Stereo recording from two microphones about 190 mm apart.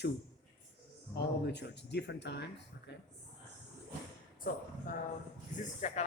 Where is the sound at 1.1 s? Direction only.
60° left (ahead or behind).